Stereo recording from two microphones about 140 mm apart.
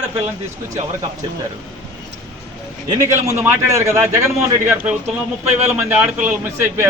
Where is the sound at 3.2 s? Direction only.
20° right (ahead or behind).